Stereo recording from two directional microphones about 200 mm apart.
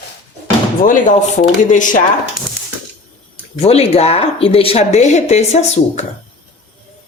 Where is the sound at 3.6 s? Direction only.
30° left (ahead or behind).